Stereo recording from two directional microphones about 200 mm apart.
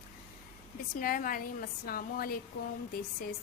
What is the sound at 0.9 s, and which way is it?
A woman's voice, 45° left (ahead or behind).